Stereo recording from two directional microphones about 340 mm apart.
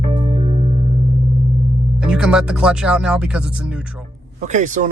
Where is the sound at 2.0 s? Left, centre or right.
Centre.